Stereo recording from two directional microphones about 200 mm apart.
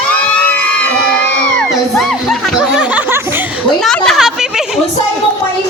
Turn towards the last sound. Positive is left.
turn(degrees=0)  # may be behind; listen again after turning